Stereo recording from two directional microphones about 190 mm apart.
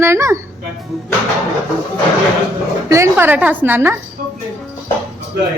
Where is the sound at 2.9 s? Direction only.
15° right (ahead or behind).